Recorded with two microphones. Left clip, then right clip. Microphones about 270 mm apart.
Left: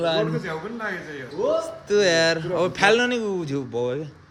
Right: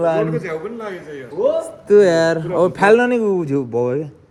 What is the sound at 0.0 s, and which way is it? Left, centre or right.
Speech, right.